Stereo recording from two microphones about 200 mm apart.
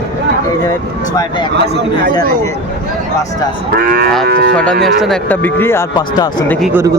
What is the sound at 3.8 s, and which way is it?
Moo, 45° right (ahead or behind).